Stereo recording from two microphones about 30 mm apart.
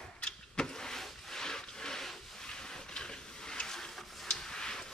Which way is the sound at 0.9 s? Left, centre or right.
Centre.